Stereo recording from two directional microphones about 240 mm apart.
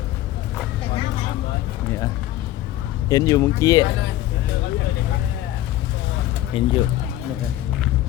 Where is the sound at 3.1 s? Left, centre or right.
Centre.